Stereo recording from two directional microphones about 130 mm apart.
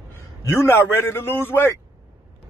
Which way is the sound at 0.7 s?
20° left (ahead or behind).